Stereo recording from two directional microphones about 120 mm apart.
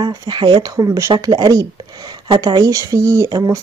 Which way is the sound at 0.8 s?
25° right (ahead or behind).